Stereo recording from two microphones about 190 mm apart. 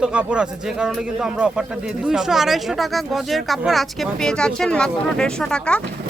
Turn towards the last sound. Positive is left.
turn(degrees=5)  # may be behind; listen again after turning